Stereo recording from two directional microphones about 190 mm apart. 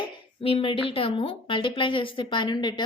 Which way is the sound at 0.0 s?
30° left (ahead or behind).